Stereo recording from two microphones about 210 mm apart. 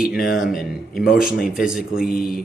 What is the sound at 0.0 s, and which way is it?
Speech, 5° right (ahead or behind).